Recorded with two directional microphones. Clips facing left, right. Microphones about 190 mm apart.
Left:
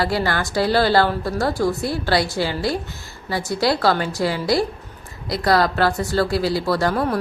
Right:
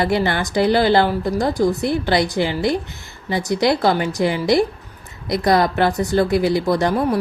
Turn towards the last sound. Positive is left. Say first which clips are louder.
# right 2 dB
turn(degrees=-15)  # may be behind; listen again after turning